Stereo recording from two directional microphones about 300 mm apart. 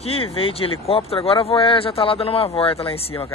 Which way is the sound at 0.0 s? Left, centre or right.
Centre.